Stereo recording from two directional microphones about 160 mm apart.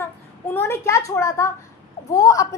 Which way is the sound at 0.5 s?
15° left (ahead or behind).